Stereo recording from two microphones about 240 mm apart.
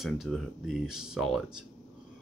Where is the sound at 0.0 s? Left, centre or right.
Centre.